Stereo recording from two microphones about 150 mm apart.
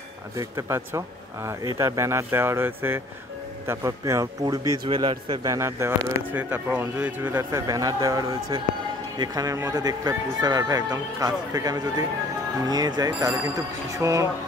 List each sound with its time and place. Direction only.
0.4 s speech: 20° right (ahead or behind)